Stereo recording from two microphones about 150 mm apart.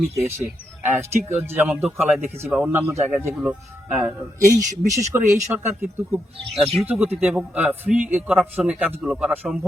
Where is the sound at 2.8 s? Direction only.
20° right (ahead or behind).